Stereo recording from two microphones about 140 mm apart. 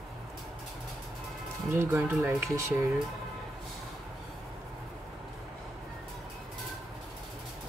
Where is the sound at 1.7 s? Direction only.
20° right (ahead or behind).